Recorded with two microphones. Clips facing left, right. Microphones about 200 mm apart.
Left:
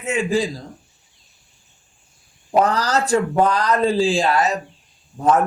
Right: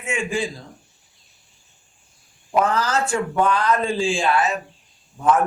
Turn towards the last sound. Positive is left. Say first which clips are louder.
# left 2 dB
turn(degrees=35)  # may be behind; listen again after turning